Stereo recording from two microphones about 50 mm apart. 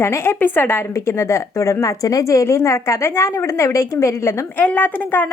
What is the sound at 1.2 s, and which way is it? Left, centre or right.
Speech, left.